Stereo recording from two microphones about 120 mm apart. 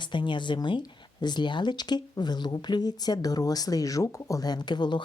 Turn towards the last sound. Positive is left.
turn(degrees=40)  # may be behind; listen again after turning